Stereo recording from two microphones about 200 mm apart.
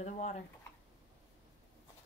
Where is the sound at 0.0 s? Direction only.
35° left (ahead or behind).